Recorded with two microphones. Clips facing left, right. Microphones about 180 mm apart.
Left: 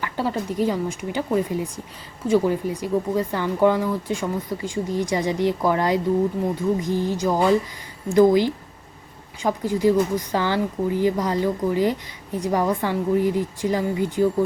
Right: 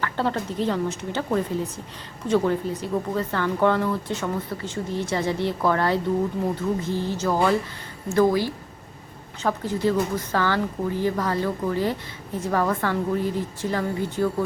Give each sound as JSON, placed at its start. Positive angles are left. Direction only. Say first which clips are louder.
{"t": 0.0, "sound": "a woman's voice", "louder": "even", "side_deg": 10}